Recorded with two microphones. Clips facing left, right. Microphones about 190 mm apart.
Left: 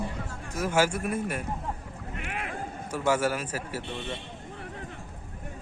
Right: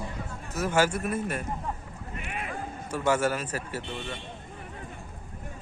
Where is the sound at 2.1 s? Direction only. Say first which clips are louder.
Left 1 dB; 80° left.